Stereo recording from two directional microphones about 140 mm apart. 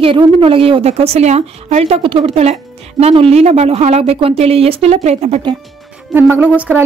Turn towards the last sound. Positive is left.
turn(degrees=-10)  # may be behind; listen again after turning